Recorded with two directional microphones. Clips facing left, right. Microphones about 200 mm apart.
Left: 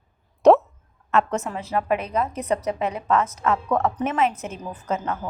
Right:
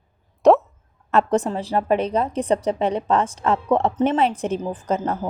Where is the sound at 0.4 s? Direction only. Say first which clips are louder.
Even; centre (ahead or behind).